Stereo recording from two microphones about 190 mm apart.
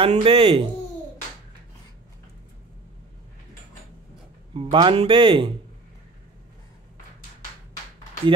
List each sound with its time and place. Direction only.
0.0 s speech: 30° right (ahead or behind)
4.6 s speech: 25° right (ahead or behind)